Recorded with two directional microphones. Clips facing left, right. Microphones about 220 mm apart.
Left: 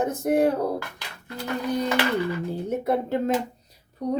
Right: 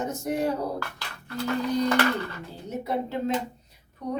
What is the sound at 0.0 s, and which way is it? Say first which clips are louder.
Speech: left 6 dB; 55° left (ahead or behind).